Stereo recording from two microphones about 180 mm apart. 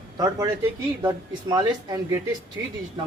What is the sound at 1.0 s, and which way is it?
Speech, 20° right (ahead or behind).